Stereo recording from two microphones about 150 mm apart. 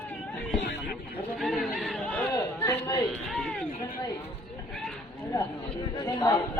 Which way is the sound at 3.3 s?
5° left (ahead or behind).